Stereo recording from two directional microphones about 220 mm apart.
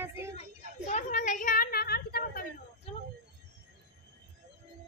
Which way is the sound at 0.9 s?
35° left (ahead or behind).